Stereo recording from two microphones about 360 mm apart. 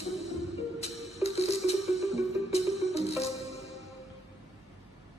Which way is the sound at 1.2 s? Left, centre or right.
Centre.